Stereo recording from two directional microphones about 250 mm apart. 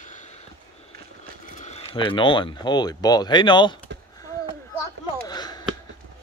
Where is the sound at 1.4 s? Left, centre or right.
Left.